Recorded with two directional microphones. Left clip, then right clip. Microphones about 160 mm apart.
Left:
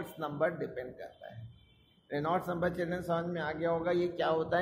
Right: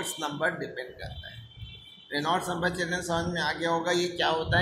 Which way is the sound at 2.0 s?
35° left (ahead or behind).